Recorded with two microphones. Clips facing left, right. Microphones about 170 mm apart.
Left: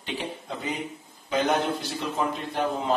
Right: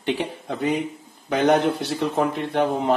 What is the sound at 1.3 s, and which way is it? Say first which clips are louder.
A man's voice: right 6 dB; 65° right (ahead or behind).